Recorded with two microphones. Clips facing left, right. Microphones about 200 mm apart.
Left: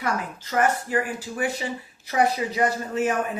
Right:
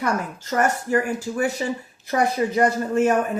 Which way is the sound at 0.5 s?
45° right (ahead or behind).